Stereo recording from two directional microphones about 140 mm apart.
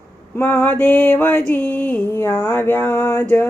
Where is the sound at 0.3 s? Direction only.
15° left (ahead or behind).